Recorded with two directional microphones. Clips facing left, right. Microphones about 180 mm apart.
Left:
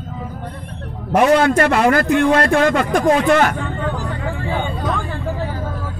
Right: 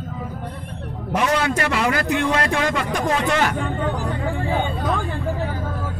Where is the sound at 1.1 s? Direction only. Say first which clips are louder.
Left 8 dB; 50° left (ahead or behind).